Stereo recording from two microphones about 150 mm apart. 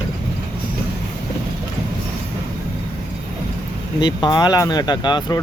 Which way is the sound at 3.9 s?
30° left (ahead or behind).